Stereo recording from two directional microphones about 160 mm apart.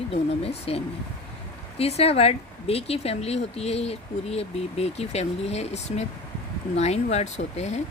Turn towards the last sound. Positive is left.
turn(degrees=45)  # may be behind; listen again after turning